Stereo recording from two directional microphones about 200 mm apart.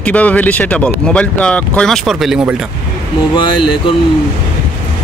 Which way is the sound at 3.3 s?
25° left (ahead or behind).